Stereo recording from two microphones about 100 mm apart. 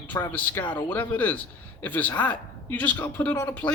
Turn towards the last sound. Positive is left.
turn(degrees=15)  # may be behind; listen again after turning